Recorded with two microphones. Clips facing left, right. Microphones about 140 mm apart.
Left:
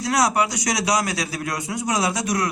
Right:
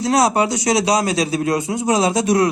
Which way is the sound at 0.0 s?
25° right (ahead or behind).